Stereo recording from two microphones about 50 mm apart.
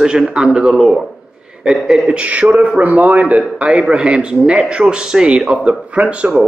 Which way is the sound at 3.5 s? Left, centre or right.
Right.